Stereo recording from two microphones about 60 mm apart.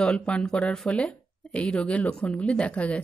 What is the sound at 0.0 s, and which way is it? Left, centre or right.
Speech, centre.